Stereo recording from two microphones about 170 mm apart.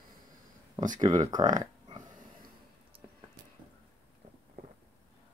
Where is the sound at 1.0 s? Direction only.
25° right (ahead or behind).